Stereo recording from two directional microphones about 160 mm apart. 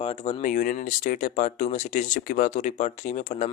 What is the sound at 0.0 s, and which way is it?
Speech, 40° left (ahead or behind).